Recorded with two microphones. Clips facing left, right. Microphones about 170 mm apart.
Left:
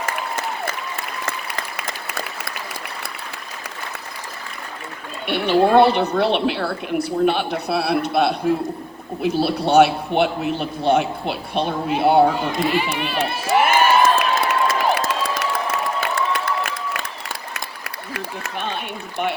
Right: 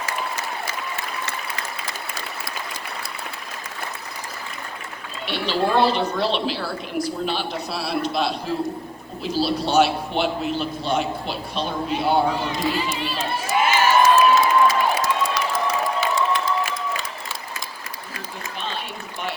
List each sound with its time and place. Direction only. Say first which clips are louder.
0.0 s applause: left 2 dB; 50° left (ahead or behind)
1.2 s applause: left 2 dB; 75° left (ahead or behind)
5.3 s a woman's voice: left 6 dB; 55° left (ahead or behind)
15.5 s music: right 1 dB; 55° left (ahead or behind)
17.5 s applause: left 2 dB; 70° left (ahead or behind)